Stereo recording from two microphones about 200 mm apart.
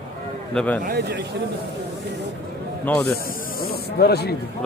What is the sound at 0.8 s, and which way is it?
Speech, 50° right (ahead or behind).